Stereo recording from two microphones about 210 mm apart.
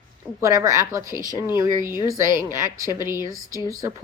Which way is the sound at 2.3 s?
40° right (ahead or behind).